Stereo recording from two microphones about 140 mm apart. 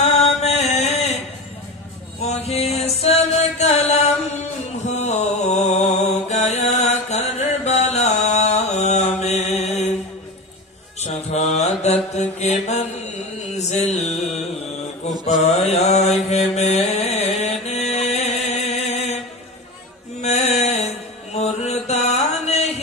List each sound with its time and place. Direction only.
0.0 s mantra: 50° left (ahead or behind)
2.2 s music: 50° left (ahead or behind)
4.7 s mantra: 55° left (ahead or behind)
11.0 s mantra: 55° left (ahead or behind)
13.6 s music: 55° left (ahead or behind)
15.0 s mantra: 50° left (ahead or behind)
20.2 s music: 50° left (ahead or behind)
21.3 s mantra: 50° left (ahead or behind)